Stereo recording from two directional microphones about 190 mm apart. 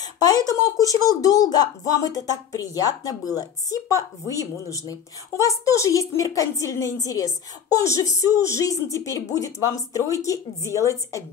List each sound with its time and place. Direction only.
0.0 s speech: 20° left (ahead or behind)